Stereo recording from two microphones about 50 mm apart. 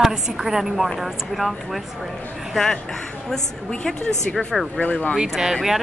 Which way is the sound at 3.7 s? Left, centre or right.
Centre.